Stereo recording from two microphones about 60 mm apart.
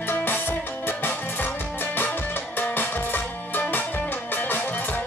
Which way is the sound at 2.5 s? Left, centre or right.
Left.